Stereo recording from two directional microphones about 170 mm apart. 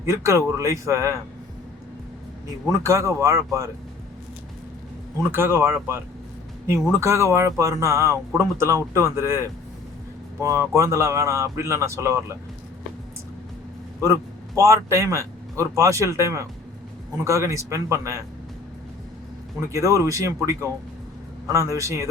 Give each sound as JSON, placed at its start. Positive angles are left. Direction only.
{"t": 0.0, "sound": "speech", "side_deg": -15}
{"t": 2.6, "sound": "speech", "side_deg": -20}
{"t": 5.3, "sound": "speech", "side_deg": -15}
{"t": 14.0, "sound": "a man's voice", "side_deg": -20}
{"t": 19.6, "sound": "speech", "side_deg": -20}